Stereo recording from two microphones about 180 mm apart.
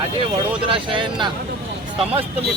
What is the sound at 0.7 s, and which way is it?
Speech, 25° right (ahead or behind).